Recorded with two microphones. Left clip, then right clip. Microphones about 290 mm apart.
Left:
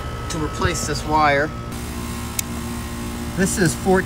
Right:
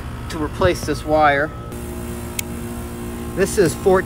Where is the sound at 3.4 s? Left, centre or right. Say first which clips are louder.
Right 4 dB; centre.